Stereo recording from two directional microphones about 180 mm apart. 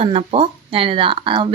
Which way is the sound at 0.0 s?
30° right (ahead or behind).